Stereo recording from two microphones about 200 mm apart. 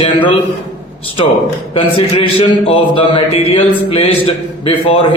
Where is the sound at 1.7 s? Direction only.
30° left (ahead or behind).